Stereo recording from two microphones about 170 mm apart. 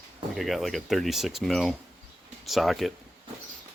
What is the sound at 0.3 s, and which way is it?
Speech, centre (ahead or behind).